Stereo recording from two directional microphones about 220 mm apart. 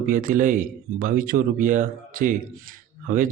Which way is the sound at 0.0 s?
40° right (ahead or behind).